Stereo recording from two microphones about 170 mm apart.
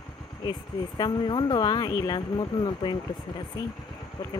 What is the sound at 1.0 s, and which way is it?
Speech, 25° left (ahead or behind).